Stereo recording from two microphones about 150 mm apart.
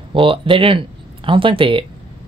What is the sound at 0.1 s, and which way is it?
A woman's voice, 35° right (ahead or behind).